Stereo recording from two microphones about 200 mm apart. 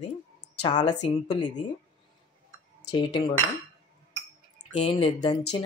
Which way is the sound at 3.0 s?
25° left (ahead or behind).